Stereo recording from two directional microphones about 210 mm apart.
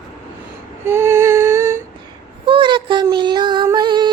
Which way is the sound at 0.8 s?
10° right (ahead or behind).